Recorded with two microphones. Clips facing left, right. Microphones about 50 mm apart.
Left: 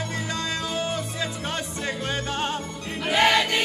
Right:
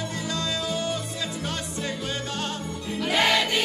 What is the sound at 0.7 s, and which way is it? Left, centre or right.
Music, left.